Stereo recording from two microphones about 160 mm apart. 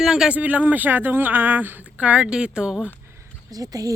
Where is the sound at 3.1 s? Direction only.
20° right (ahead or behind).